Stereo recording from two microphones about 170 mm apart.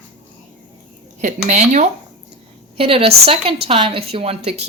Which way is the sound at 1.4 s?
45° right (ahead or behind).